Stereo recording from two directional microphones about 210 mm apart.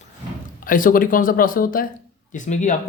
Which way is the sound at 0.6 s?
40° left (ahead or behind).